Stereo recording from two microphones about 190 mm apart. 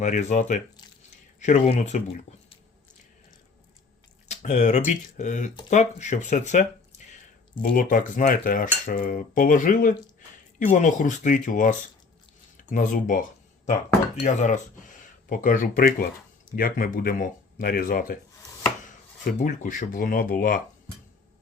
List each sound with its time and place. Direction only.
0.0 s speech: 40° left (ahead or behind)
4.3 s speech: 40° left (ahead or behind)
7.0 s a sound: 40° left (ahead or behind)
7.6 s cutlery: 45° left (ahead or behind)
10.7 s speech: 40° left (ahead or behind)
12.7 s cutlery: 45° left (ahead or behind)
14.2 s speech: 40° left (ahead or behind)
15.3 s cutlery: 45° left (ahead or behind)
19.2 s cutlery: 40° left (ahead or behind)